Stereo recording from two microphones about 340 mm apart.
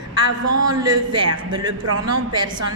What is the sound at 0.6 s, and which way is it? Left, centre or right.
A man's voice, centre.